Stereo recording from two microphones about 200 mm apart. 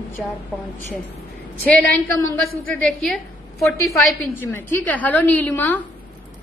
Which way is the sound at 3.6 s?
15° left (ahead or behind).